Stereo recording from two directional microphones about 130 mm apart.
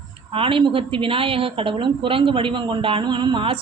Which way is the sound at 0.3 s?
45° right (ahead or behind).